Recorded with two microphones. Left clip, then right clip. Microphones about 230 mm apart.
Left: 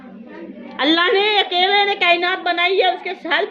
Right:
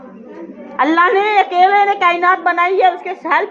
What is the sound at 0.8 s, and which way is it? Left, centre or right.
A woman's voice, centre.